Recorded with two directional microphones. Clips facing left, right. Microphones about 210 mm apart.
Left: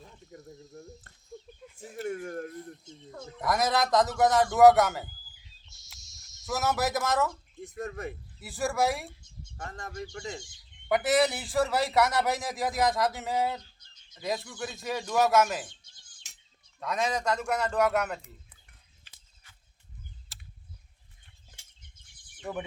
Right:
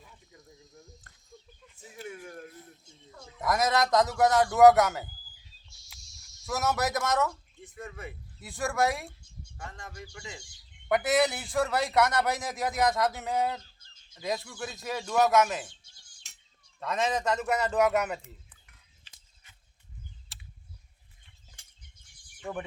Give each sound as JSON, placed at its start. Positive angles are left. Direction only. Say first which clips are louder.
{"t": 0.0, "sound": "cricket", "louder": "left 7 dB", "side_deg": 50}
{"t": 2.0, "sound": "speech", "louder": "left 8 dB", "side_deg": 50}
{"t": 3.3, "sound": "a man's voice", "louder": "even", "side_deg": 0}
{"t": 6.4, "sound": "a man's voice", "louder": "left 1 dB", "side_deg": 0}
{"t": 7.6, "sound": "speech", "louder": "left 6 dB", "side_deg": 45}
{"t": 8.4, "sound": "a man's voice", "louder": "even", "side_deg": 5}
{"t": 9.6, "sound": "speech", "louder": "left 5 dB", "side_deg": 40}
{"t": 10.8, "sound": "a man's voice", "louder": "left 1 dB", "side_deg": 0}
{"t": 16.2, "sound": "a sound", "louder": "even", "side_deg": 0}
{"t": 16.8, "sound": "a man's voice", "louder": "right 1 dB", "side_deg": 0}
{"t": 20.3, "sound": "a sound", "louder": "even", "side_deg": 0}